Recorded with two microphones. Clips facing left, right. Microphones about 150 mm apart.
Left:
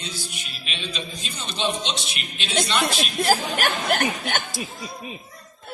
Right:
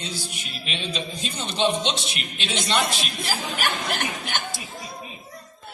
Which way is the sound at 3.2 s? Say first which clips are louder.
Left 7 dB; 50° left (ahead or behind).